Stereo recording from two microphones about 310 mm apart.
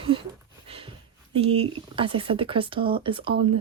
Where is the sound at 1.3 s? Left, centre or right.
Centre.